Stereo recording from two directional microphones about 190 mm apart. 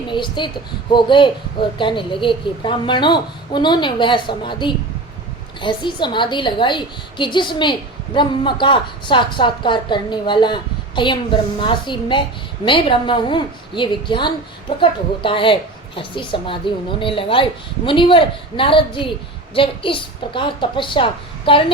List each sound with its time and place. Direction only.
0.1 s a child's voice: 25° left (ahead or behind)